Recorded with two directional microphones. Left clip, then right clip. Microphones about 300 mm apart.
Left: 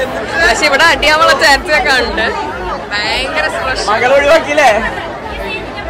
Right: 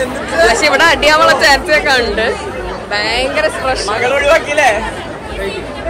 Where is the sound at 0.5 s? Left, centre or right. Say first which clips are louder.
Left 2 dB; centre.